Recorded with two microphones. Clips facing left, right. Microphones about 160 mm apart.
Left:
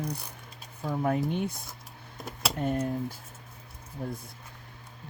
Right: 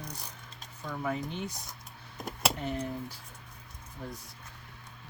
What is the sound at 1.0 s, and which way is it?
Speech, 55° left (ahead or behind).